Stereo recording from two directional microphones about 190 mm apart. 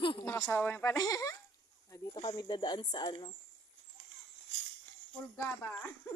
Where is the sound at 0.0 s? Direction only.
25° left (ahead or behind).